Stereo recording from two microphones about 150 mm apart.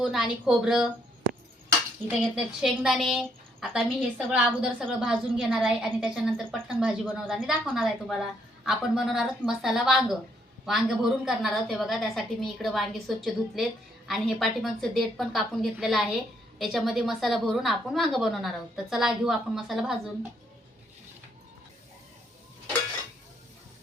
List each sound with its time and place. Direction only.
0.0 s a woman's voice: centre (ahead or behind)
2.2 s a woman's voice: centre (ahead or behind)